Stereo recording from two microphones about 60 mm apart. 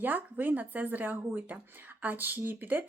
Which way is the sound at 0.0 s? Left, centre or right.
Right.